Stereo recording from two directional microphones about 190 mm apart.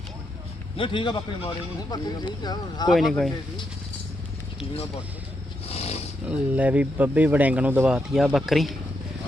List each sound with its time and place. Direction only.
0.8 s a man's voice: 25° left (ahead or behind)
2.9 s speech: centre (ahead or behind)
5.6 s roaring cats: 30° left (ahead or behind)
6.2 s speech: 5° right (ahead or behind)